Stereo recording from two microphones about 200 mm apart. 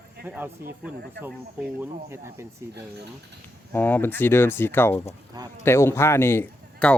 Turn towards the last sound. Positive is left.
turn(degrees=10)  # may be behind; listen again after turning